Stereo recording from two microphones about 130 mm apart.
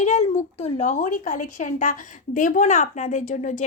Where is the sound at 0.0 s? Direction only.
55° left (ahead or behind).